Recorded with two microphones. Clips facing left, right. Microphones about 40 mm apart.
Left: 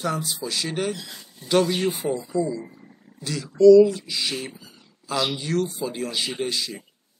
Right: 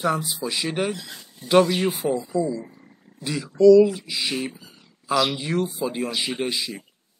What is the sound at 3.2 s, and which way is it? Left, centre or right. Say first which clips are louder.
Speech: right 2 dB; centre.